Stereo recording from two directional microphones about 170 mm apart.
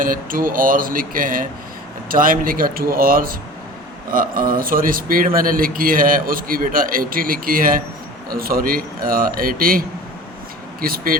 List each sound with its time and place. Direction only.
0.0 s speech: 55° right (ahead or behind)